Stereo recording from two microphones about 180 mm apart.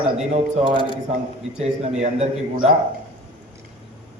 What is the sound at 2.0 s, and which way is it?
Speech, 40° right (ahead or behind).